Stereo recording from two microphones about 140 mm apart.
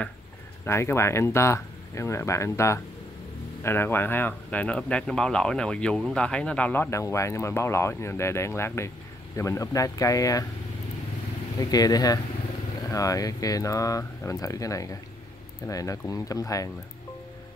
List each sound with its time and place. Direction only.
0.7 s speech: 20° left (ahead or behind)
11.5 s speech: 25° left (ahead or behind)